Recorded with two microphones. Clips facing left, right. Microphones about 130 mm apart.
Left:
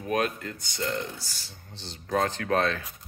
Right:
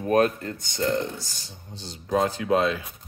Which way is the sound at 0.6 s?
25° right (ahead or behind).